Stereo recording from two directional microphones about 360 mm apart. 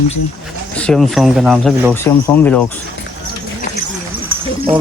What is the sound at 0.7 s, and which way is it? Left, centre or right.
Speech, centre.